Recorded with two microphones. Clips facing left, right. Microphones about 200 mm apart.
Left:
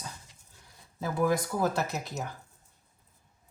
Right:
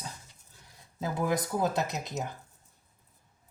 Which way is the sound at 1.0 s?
20° right (ahead or behind).